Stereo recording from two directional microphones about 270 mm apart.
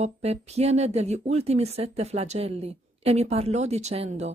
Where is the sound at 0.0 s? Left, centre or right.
Right.